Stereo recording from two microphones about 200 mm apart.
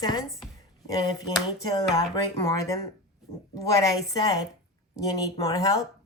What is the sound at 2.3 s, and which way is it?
A woman's voice, 15° left (ahead or behind).